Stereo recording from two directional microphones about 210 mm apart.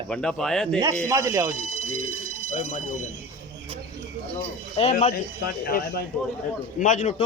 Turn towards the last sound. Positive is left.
turn(degrees=35)  # may be behind; listen again after turning